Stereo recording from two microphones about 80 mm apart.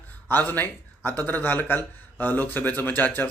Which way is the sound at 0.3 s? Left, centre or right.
Left.